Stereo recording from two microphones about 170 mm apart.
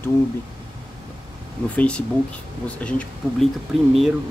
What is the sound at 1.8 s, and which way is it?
Speech, 5° left (ahead or behind).